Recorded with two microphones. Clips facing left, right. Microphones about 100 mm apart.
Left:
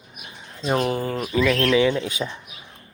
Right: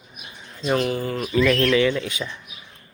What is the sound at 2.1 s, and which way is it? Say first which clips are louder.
Speech: left 2 dB; 30° left (ahead or behind).